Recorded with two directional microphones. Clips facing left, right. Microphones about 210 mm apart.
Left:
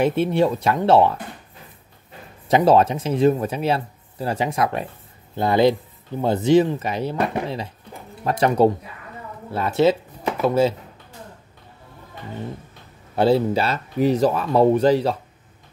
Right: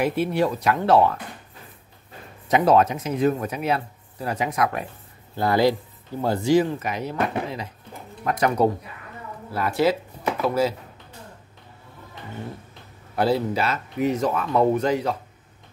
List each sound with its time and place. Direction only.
0.0 s speech: 25° left (ahead or behind)
2.4 s speech: 30° left (ahead or behind)
13.1 s speech: 25° left (ahead or behind)